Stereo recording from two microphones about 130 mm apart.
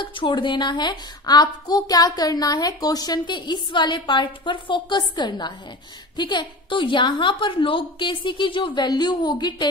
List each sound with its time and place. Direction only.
0.0 s a woman's voice: 40° left (ahead or behind)